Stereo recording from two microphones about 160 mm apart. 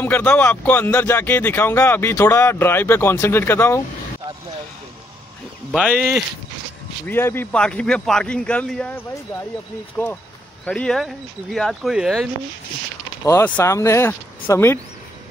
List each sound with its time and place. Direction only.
0.0 s speech: 10° left (ahead or behind)
5.7 s speech: 5° left (ahead or behind)
7.1 s speech: 15° left (ahead or behind)
10.6 s speech: 5° left (ahead or behind)
13.3 s speech: 15° left (ahead or behind)